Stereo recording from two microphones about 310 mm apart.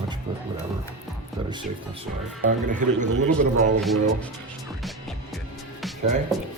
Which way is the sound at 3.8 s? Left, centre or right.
Centre.